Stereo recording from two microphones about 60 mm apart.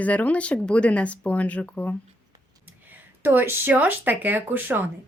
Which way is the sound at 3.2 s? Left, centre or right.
Right.